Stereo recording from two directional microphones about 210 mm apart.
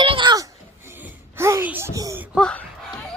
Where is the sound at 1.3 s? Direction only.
15° right (ahead or behind).